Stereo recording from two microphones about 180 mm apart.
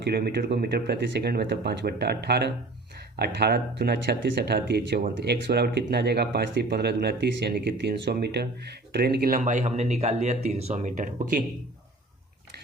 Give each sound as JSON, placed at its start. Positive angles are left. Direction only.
{"t": 0.0, "sound": "speech", "side_deg": -65}